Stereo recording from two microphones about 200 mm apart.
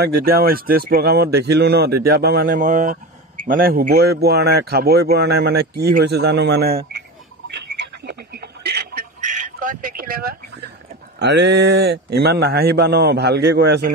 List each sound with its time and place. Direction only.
0.0 s speech: 50° right (ahead or behind)
7.4 s telephone: 60° right (ahead or behind)
9.2 s a sound: 40° right (ahead or behind)
11.1 s speech: 60° right (ahead or behind)